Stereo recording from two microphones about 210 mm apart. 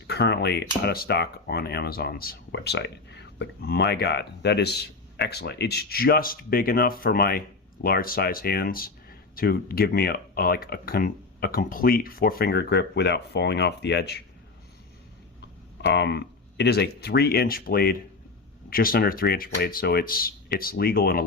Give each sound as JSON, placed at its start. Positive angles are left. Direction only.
{"t": 0.1, "sound": "speech", "side_deg": 50}
{"t": 15.8, "sound": "speech", "side_deg": 55}